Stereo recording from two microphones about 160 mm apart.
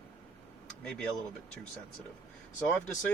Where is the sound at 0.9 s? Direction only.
5° left (ahead or behind).